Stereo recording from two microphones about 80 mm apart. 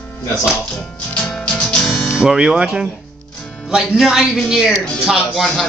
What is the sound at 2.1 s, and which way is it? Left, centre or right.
Speech, centre.